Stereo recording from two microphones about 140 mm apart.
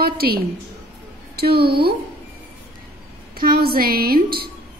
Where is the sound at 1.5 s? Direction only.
90° right.